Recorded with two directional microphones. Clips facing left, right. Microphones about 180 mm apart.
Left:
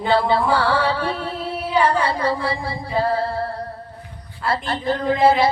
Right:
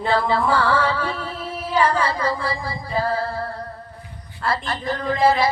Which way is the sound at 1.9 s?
30° left (ahead or behind).